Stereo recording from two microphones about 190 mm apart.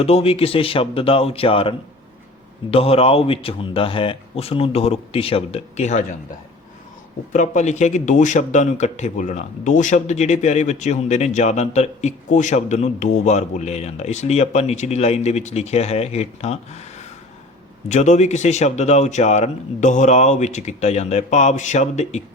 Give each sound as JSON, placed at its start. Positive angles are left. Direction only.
{"t": 0.0, "sound": "speech", "side_deg": 30}
{"t": 7.3, "sound": "speech", "side_deg": 40}